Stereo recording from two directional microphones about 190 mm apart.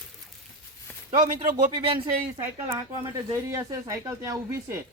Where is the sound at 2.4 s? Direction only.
15° right (ahead or behind).